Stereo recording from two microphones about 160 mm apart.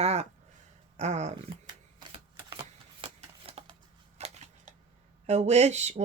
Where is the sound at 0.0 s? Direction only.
40° right (ahead or behind).